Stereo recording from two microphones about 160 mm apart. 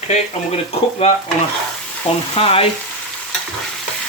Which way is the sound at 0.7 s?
40° left (ahead or behind).